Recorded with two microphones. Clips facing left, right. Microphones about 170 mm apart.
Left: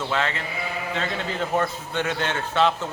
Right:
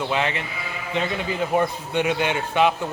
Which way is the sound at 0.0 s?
15° right (ahead or behind).